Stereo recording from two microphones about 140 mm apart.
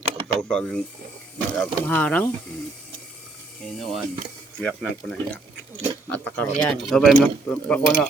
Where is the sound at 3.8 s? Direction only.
Centre (ahead or behind).